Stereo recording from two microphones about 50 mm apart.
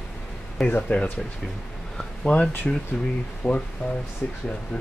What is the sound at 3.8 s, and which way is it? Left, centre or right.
Speech, centre.